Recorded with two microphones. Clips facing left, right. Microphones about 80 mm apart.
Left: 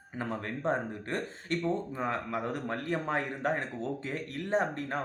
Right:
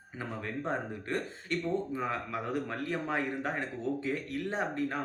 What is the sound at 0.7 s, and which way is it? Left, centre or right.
A man's voice, left.